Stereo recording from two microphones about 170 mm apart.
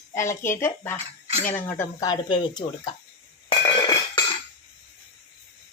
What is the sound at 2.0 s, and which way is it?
Speech, 25° left (ahead or behind).